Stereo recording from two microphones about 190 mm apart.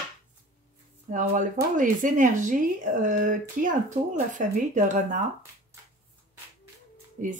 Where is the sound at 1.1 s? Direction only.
40° right (ahead or behind).